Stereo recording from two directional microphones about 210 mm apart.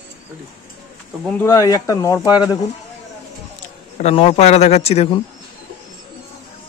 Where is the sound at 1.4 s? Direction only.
15° left (ahead or behind).